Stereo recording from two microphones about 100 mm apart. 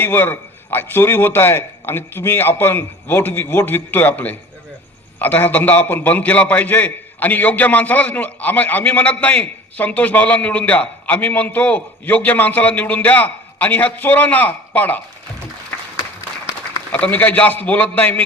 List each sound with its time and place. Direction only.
0.0 s a man's voice: 20° left (ahead or behind)
15.7 s applause: 15° left (ahead or behind)
16.9 s a man's voice: 15° left (ahead or behind)